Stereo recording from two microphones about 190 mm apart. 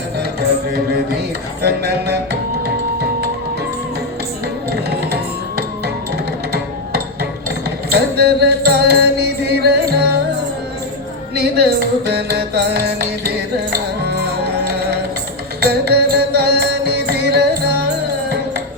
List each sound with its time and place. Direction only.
0.2 s music: 55° right (ahead or behind)
1.6 s a sound: 55° right (ahead or behind)
2.6 s music: 55° right (ahead or behind)
4.7 s music: 55° right (ahead or behind)
6.5 s music: 55° right (ahead or behind)
11.3 s music: 55° right (ahead or behind)